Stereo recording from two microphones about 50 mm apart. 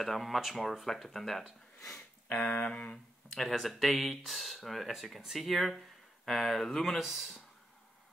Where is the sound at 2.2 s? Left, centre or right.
Left.